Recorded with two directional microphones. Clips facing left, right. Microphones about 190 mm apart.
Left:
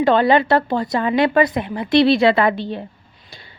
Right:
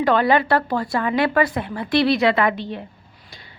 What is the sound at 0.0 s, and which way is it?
Speech, 25° left (ahead or behind).